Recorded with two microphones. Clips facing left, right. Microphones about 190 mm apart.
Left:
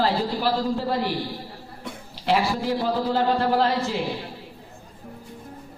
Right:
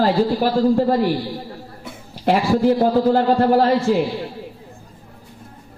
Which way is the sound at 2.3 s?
45° right (ahead or behind).